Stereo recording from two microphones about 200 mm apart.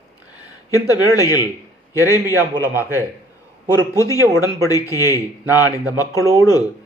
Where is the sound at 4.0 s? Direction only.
15° left (ahead or behind).